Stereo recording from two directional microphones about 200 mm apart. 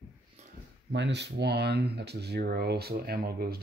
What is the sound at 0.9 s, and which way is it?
Speech, 60° right (ahead or behind).